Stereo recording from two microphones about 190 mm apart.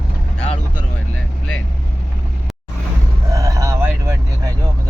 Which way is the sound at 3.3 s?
15° right (ahead or behind).